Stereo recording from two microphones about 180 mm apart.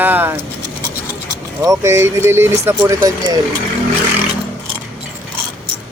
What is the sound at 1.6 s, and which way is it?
Speech, 15° right (ahead or behind).